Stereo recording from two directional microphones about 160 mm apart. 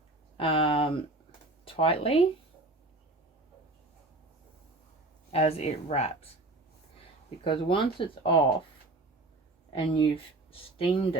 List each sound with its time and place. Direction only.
0.3 s speech: 35° left (ahead or behind)
5.3 s speech: 40° left (ahead or behind)
7.4 s speech: 30° left (ahead or behind)
9.7 s speech: 30° left (ahead or behind)